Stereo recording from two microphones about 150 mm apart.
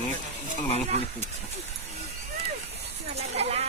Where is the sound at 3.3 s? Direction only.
45° right (ahead or behind).